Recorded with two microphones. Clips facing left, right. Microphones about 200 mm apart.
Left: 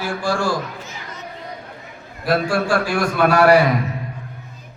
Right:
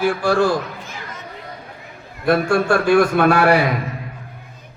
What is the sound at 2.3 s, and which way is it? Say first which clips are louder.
A man's voice: right 3 dB; 60° right (ahead or behind).